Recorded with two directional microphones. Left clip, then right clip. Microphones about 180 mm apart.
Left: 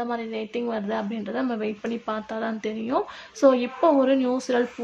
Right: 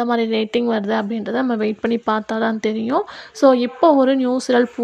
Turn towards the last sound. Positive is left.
turn(degrees=-35)  # may be behind; listen again after turning